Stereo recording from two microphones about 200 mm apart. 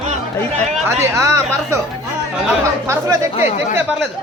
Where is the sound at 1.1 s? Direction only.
15° right (ahead or behind).